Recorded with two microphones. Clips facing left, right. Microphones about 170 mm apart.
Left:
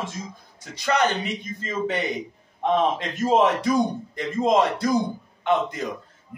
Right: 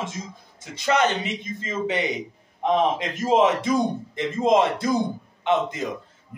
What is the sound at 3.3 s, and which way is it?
A man's voice, 20° right (ahead or behind).